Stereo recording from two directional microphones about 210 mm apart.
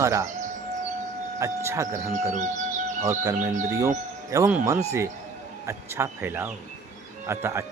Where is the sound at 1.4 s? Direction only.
15° right (ahead or behind).